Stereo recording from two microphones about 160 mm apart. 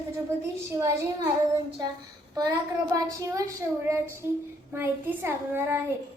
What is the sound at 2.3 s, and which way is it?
A woman's voice, 25° right (ahead or behind).